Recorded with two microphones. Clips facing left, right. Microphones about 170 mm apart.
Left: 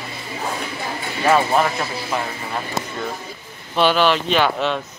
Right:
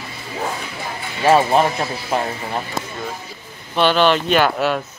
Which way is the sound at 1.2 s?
25° right (ahead or behind).